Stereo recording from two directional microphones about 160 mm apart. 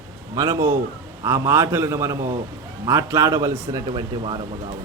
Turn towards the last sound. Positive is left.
turn(degrees=-30)  # may be behind; listen again after turning